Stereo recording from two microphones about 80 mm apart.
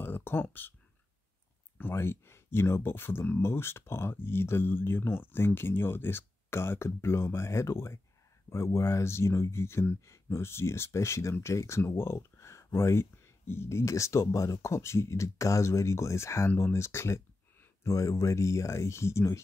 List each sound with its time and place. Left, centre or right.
0.0 s speech: left
1.8 s speech: left